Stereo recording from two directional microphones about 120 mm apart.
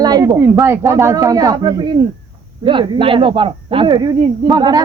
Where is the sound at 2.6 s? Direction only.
45° right (ahead or behind).